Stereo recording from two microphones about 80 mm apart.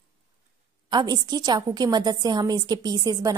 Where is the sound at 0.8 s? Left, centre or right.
Right.